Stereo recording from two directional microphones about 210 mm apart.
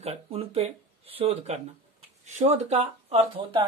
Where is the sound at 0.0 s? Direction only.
30° right (ahead or behind).